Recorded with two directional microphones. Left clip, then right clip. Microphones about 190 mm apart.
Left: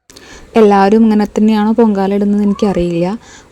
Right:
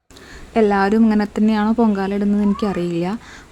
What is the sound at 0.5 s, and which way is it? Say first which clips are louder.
A woman's voice: left 8 dB; 25° left (ahead or behind).